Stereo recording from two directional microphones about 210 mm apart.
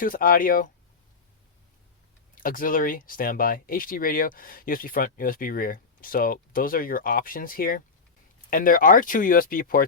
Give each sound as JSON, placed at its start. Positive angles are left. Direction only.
{"t": 0.0, "sound": "speech", "side_deg": 40}
{"t": 2.3, "sound": "speech", "side_deg": 40}